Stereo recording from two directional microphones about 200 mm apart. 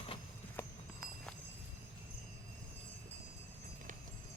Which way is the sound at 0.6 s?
10° left (ahead or behind).